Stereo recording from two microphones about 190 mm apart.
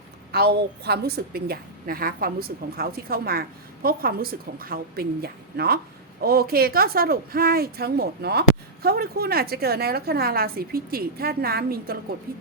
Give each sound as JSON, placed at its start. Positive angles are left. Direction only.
{"t": 0.3, "sound": "speech", "side_deg": -55}